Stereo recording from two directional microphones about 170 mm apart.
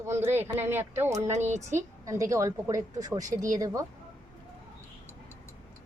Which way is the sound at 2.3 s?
20° right (ahead or behind).